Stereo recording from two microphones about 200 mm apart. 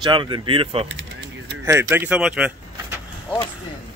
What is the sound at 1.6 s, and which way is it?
Speech, 15° right (ahead or behind).